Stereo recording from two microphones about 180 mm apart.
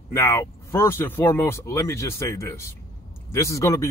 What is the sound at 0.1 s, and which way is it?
Speech, 15° left (ahead or behind).